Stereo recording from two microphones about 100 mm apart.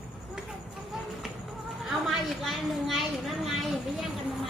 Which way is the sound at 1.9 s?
Centre (ahead or behind).